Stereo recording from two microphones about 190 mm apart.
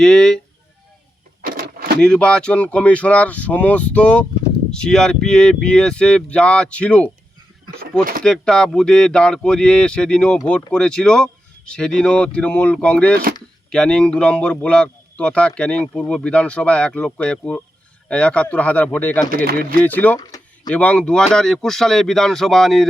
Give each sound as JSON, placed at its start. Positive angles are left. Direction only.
{"t": 0.0, "sound": "a man's voice", "side_deg": 5}
{"t": 1.4, "sound": "a sound", "side_deg": -50}
{"t": 2.0, "sound": "a man's voice", "side_deg": 5}
{"t": 8.2, "sound": "a man's voice", "side_deg": 5}